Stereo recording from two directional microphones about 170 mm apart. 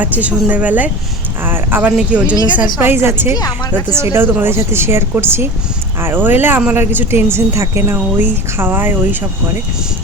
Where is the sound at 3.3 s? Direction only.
20° left (ahead or behind).